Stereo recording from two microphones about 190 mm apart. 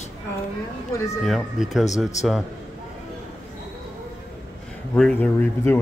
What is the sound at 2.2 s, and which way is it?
Speech, 35° left (ahead or behind).